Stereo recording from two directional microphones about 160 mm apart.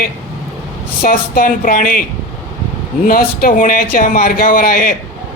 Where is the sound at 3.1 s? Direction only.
65° left (ahead or behind).